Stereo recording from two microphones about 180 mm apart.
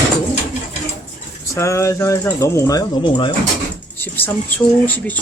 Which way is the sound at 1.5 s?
15° left (ahead or behind).